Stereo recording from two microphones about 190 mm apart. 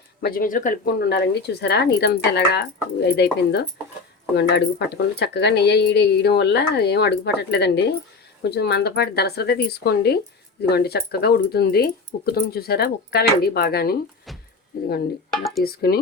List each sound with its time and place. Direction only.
0.2 s speech: 50° left (ahead or behind)
15.3 s speech: centre (ahead or behind)
15.6 s speech: 55° left (ahead or behind)